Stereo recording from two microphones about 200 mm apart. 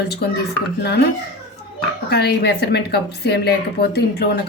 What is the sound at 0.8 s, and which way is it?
Speech, 55° left (ahead or behind).